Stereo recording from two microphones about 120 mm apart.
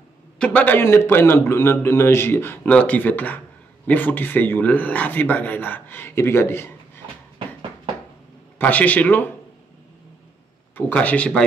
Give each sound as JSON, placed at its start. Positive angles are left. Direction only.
{"t": 0.4, "sound": "a man's voice", "side_deg": 10}
{"t": 8.5, "sound": "a man's voice", "side_deg": 15}
{"t": 10.8, "sound": "a man's voice", "side_deg": 15}